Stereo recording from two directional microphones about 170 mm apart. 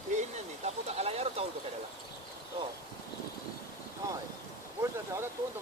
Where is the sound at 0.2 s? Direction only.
40° right (ahead or behind).